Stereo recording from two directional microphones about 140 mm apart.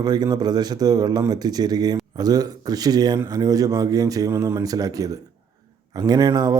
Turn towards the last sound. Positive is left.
turn(degrees=-25)  # may be behind; listen again after turning